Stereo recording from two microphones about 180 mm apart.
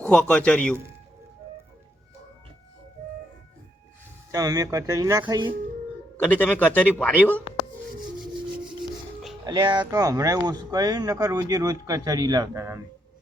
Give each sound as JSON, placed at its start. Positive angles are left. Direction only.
{"t": 0.0, "sound": "a man's voice", "side_deg": 5}
{"t": 4.3, "sound": "speech", "side_deg": -20}
{"t": 6.2, "sound": "a man's voice", "side_deg": 10}
{"t": 9.4, "sound": "speech", "side_deg": -25}